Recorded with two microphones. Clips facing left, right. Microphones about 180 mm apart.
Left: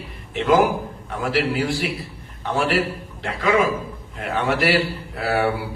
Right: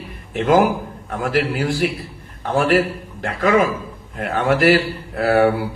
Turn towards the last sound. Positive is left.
turn(degrees=-45)  # may be behind; listen again after turning